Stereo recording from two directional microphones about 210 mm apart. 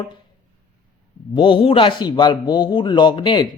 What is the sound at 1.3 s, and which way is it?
Speech, 25° left (ahead or behind).